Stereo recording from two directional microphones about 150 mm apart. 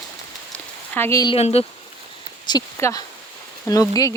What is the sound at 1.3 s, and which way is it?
Speech, 45° left (ahead or behind).